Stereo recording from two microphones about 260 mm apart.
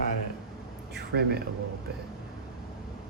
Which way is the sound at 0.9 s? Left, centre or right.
Right.